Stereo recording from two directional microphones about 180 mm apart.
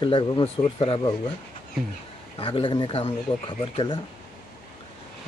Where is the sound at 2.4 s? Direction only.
30° left (ahead or behind).